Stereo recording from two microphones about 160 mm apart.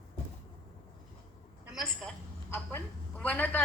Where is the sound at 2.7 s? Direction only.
10° left (ahead or behind).